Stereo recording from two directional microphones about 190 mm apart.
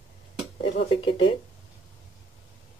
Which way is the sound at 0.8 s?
25° left (ahead or behind).